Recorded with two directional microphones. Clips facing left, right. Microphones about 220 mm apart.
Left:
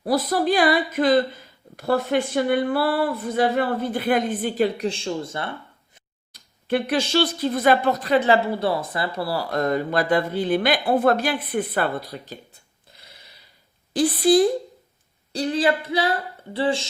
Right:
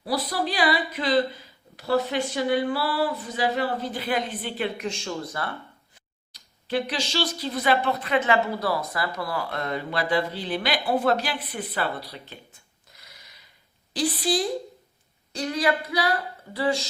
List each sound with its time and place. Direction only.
0.0 s speech: 50° left (ahead or behind); by 5.5 s 25° left (ahead or behind)
6.3 s speech: 55° left (ahead or behind)
7.9 s a woman's voice: 40° left (ahead or behind)
12.9 s a sound: 30° left (ahead or behind)
13.9 s a woman's voice: 55° left (ahead or behind)
15.3 s speech: 30° left (ahead or behind)